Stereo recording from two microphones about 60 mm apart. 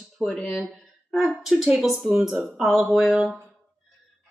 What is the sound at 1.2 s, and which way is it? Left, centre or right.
A woman's voice, centre.